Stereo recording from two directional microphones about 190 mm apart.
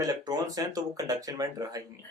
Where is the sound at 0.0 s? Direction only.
20° right (ahead or behind).